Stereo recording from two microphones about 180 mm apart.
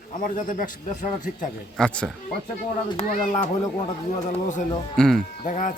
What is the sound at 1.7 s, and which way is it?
Speech, 5° left (ahead or behind).